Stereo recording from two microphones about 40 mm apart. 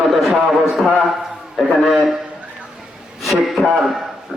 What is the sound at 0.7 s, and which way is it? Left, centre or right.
Speech, centre.